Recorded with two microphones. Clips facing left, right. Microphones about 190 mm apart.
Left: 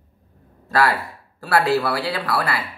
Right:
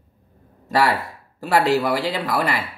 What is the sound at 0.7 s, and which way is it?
Speech, 20° right (ahead or behind).